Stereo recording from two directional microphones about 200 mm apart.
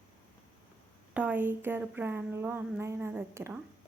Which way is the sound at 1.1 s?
5° right (ahead or behind).